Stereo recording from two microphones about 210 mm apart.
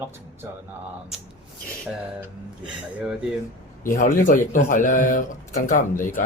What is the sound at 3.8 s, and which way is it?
Speech, 40° left (ahead or behind).